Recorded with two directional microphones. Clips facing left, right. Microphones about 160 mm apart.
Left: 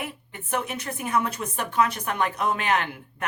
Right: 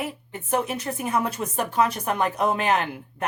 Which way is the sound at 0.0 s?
30° right (ahead or behind).